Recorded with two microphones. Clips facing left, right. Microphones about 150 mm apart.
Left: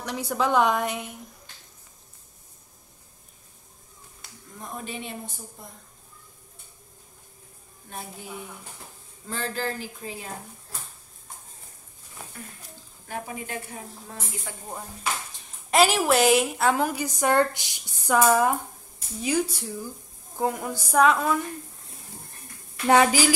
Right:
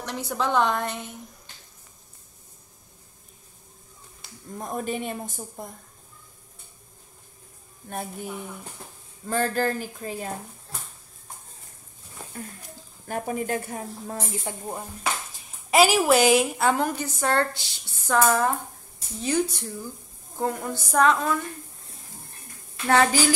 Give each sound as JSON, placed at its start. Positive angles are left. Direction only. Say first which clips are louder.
{"t": 0.0, "sound": "a woman's voice", "louder": "left 2 dB", "side_deg": 5}
{"t": 4.6, "sound": "a woman's voice", "louder": "right 6 dB", "side_deg": -50}
{"t": 9.3, "sound": "a woman's voice", "louder": "right 6 dB", "side_deg": -50}
{"t": 13.0, "sound": "a woman's voice", "louder": "right 6 dB", "side_deg": -45}
{"t": 14.5, "sound": "dishes", "louder": "right 6 dB", "side_deg": -25}
{"t": 15.7, "sound": "a woman's voice", "louder": "right 2 dB", "side_deg": -5}
{"t": 22.8, "sound": "a woman's voice", "louder": "left 1 dB", "side_deg": 10}